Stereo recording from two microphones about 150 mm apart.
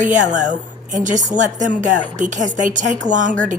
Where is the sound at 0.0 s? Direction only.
55° right (ahead or behind).